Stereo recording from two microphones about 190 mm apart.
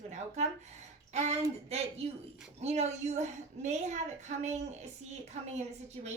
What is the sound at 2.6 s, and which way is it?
A woman's voice, 35° right (ahead or behind).